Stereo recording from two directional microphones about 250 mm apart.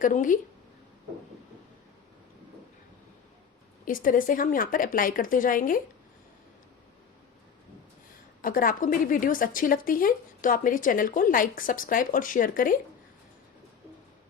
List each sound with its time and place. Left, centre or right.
0.0 s speech: left
3.8 s speech: left
8.4 s speech: left